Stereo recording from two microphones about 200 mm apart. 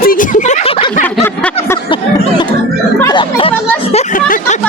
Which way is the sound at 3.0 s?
25° left (ahead or behind).